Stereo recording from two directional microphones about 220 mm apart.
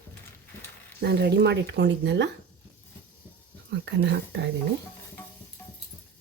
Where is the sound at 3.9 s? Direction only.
50° right (ahead or behind).